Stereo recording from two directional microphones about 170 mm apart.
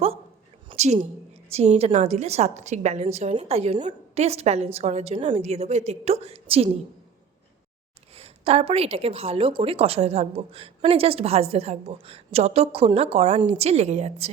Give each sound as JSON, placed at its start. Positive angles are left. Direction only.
{"t": 0.7, "sound": "a sound", "side_deg": -35}
{"t": 1.5, "sound": "a woman's voice", "side_deg": -40}
{"t": 8.1, "sound": "a woman's voice", "side_deg": -35}